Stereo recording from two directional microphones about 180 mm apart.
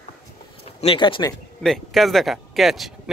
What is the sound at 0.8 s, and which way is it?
Speech, 30° left (ahead or behind).